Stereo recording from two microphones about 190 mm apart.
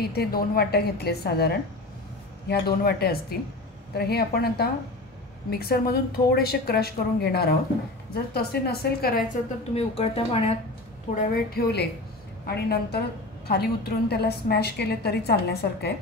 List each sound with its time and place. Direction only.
0.1 s a woman's voice: 55° left (ahead or behind)
9.8 s speech: 30° left (ahead or behind)
11.1 s a woman's voice: 50° left (ahead or behind)